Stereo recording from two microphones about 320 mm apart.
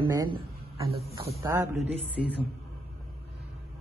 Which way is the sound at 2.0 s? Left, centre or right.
Right.